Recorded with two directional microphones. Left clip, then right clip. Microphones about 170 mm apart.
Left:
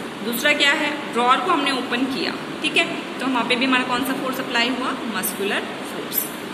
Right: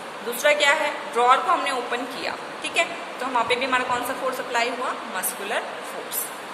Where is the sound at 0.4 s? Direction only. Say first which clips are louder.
Left 1 dB; 20° right (ahead or behind).